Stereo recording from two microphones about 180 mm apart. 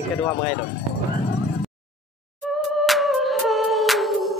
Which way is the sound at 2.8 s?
Centre (ahead or behind).